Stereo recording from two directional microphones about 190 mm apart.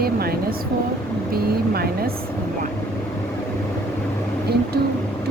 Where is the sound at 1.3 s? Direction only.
55° right (ahead or behind).